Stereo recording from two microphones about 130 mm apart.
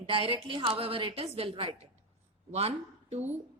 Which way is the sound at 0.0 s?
45° right (ahead or behind).